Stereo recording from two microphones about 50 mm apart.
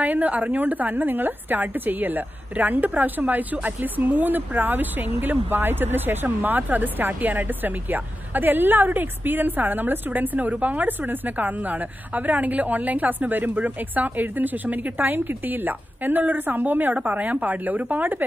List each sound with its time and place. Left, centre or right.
0.0 s speech: right